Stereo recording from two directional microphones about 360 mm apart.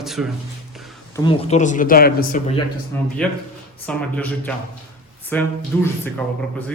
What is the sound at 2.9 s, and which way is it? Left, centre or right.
A man's voice, centre.